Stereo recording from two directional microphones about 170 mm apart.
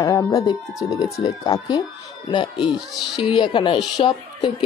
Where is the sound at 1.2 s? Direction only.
20° left (ahead or behind).